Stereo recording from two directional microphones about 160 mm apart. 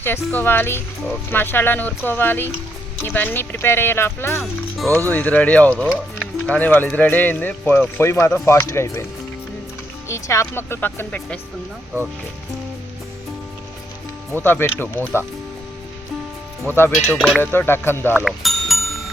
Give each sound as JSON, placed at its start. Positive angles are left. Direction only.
{"t": 0.0, "sound": "speech", "side_deg": 15}
{"t": 10.1, "sound": "speech", "side_deg": 20}
{"t": 14.3, "sound": "speech", "side_deg": 15}
{"t": 17.1, "sound": "speech", "side_deg": 0}
{"t": 17.4, "sound": "speech", "side_deg": 15}
{"t": 18.3, "sound": "bicycle bell", "side_deg": 0}